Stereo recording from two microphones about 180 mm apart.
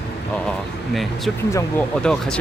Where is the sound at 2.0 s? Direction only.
5° left (ahead or behind).